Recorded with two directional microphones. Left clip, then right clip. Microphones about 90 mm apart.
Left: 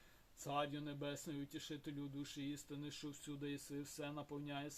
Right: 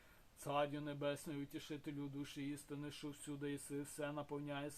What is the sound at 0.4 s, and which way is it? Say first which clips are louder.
Speech: right 2 dB; 25° left (ahead or behind).